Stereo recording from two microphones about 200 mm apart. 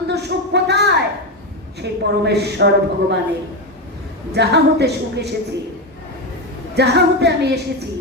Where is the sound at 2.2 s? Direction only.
55° right (ahead or behind).